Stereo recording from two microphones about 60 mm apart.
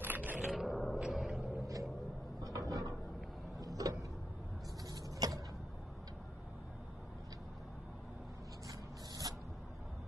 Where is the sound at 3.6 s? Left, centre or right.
Right.